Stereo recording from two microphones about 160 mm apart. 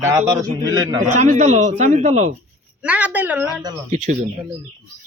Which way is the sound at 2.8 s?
10° right (ahead or behind).